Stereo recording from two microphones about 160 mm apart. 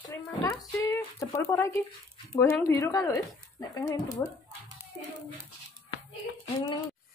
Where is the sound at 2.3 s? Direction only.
20° left (ahead or behind).